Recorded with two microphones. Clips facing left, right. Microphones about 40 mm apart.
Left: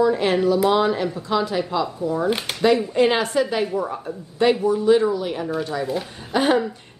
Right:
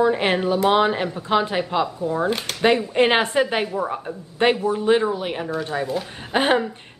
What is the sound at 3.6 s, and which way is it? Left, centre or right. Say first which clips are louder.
Speech: left 1 dB; right.